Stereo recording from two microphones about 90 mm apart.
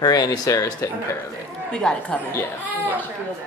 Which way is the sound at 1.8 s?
5° left (ahead or behind).